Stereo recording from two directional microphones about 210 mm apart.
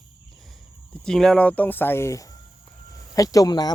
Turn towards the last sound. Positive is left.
turn(degrees=20)  # may be behind; listen again after turning